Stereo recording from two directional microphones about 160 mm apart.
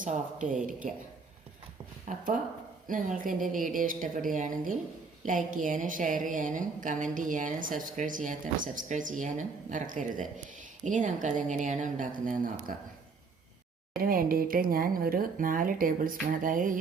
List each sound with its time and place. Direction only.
0.0 s a woman's voice: 55° right (ahead or behind)
2.0 s a woman's voice: 55° right (ahead or behind)
13.9 s a woman's voice: 65° right (ahead or behind)